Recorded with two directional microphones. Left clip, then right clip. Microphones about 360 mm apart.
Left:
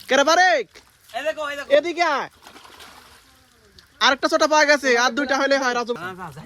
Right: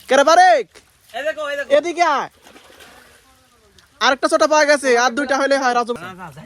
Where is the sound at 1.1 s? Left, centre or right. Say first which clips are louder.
Right 3 dB; left.